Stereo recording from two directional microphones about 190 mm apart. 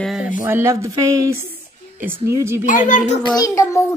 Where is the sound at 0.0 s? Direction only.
Centre (ahead or behind).